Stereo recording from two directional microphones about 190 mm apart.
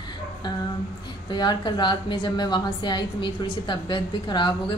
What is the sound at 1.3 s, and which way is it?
A woman's voice, 20° left (ahead or behind).